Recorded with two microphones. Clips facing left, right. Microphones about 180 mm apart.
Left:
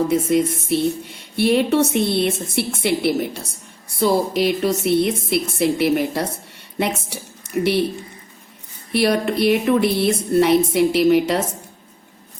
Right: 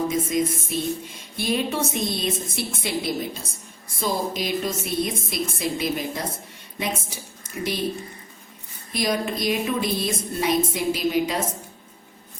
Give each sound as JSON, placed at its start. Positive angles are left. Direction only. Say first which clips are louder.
{"t": 0.1, "sound": "a woman's voice", "louder": "left 6 dB", "side_deg": 70}
{"t": 8.9, "sound": "speech", "louder": "left 7 dB", "side_deg": 70}